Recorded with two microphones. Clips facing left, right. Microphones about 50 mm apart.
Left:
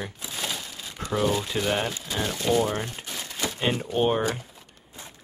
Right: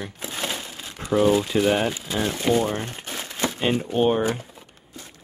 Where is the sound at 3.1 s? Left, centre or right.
Right.